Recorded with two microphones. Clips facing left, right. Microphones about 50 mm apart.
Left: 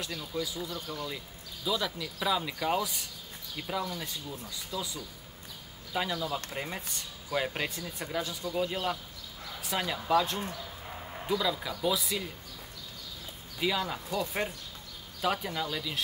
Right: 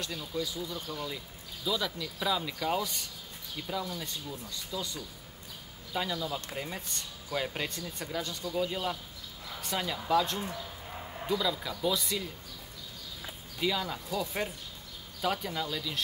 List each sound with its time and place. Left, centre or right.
0.0 s speech: centre
3.8 s speech: centre
13.6 s speech: centre